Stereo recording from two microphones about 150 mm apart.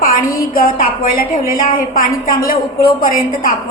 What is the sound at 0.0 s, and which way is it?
A woman's voice, 70° left (ahead or behind).